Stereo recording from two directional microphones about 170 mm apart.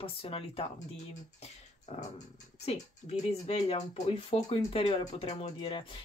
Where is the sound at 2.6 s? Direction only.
35° left (ahead or behind).